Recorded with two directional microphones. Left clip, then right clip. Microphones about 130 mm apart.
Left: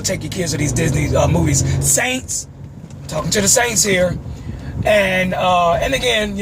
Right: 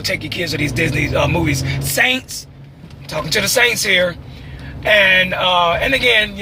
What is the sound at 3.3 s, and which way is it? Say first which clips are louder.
Speech: right 2 dB; 25° left (ahead or behind).